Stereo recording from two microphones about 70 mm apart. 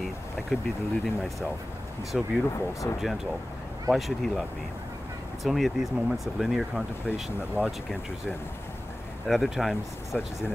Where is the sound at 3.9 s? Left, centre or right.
Centre.